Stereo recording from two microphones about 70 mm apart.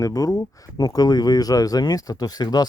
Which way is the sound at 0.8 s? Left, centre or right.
Left.